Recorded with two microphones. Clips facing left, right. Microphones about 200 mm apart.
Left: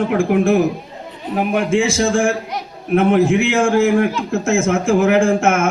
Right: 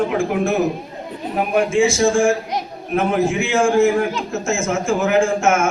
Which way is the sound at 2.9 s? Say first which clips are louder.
Left 5 dB; 60° left (ahead or behind).